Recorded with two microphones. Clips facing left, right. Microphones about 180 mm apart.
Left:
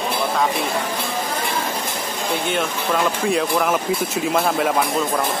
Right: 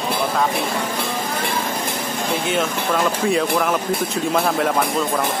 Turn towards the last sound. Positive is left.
turn(degrees=0)  # may be behind; listen again after turning